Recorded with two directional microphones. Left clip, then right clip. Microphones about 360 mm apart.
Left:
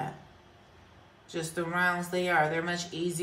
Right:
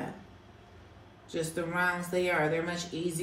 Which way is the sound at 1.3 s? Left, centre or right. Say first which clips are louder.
Even; centre.